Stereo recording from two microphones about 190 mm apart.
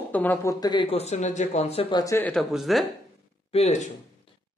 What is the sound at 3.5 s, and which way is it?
Speech, 35° left (ahead or behind).